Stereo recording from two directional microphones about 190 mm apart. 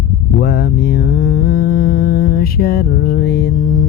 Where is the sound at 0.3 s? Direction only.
55° left (ahead or behind).